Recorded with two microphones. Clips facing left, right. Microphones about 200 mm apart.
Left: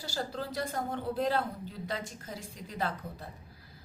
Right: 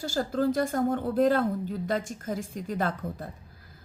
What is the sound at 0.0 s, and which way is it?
Speech, 50° right (ahead or behind).